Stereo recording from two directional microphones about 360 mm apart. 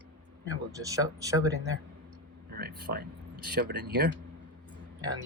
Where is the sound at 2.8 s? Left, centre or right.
Right.